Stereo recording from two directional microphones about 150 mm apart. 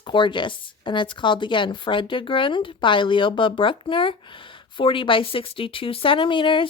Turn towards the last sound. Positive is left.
turn(degrees=35)  # may be behind; listen again after turning